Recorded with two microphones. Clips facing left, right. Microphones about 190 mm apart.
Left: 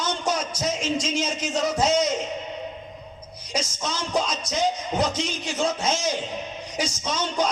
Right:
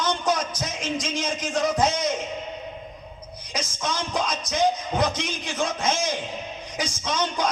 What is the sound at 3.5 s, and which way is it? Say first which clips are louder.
Speech: even; 55° right (ahead or behind).